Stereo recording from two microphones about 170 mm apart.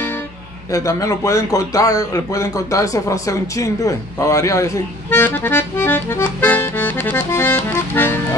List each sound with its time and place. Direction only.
0.7 s a man's voice: 20° left (ahead or behind)